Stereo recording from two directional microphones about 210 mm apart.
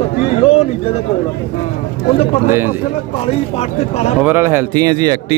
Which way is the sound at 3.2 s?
30° left (ahead or behind).